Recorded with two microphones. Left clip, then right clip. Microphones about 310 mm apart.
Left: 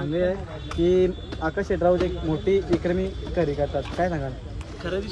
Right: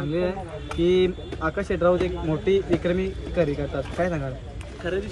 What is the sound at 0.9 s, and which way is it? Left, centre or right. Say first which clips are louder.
Speech: even; right.